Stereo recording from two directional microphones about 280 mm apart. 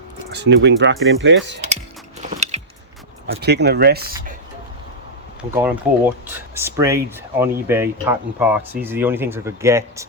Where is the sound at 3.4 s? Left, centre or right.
Right.